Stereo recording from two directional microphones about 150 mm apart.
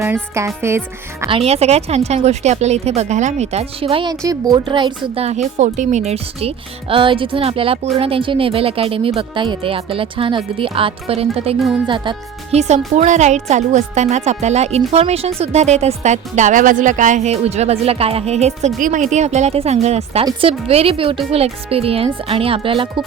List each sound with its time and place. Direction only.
0.0 s speech: 20° right (ahead or behind)
1.3 s speech: 40° right (ahead or behind)
4.1 s speech: 25° right (ahead or behind); by 5.4 s 40° right (ahead or behind)
5.5 s speech: 55° right (ahead or behind); by 12.5 s 35° right (ahead or behind)
12.5 s speech: 50° right (ahead or behind)
18.8 s speech: 60° right (ahead or behind); by 22.9 s 35° right (ahead or behind)